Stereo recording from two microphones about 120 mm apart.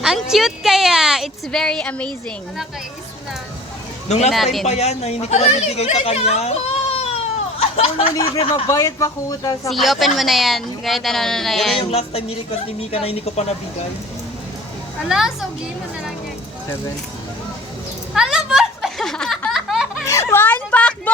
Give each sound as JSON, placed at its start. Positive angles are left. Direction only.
{"t": 0.0, "sound": "a woman's voice", "side_deg": -5}
{"t": 4.6, "sound": "speech", "side_deg": 65}
{"t": 8.6, "sound": "speech", "side_deg": 25}
{"t": 9.6, "sound": "a woman's voice", "side_deg": 0}
{"t": 11.8, "sound": "speech", "side_deg": 55}
{"t": 15.0, "sound": "a woman's voice", "side_deg": -5}
{"t": 18.1, "sound": "a sound", "side_deg": -5}
{"t": 20.1, "sound": "a sound", "side_deg": 20}